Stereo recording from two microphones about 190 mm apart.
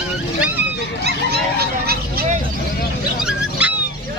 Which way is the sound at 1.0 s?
55° right (ahead or behind).